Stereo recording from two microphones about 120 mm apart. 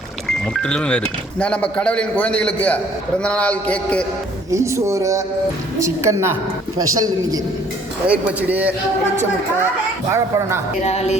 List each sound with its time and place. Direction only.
0.3 s speech: 5° left (ahead or behind)
4.5 s speech: 25° right (ahead or behind)
8.0 s speech: 10° right (ahead or behind)
10.1 s speech: 25° right (ahead or behind)
10.8 s speech: 60° left (ahead or behind)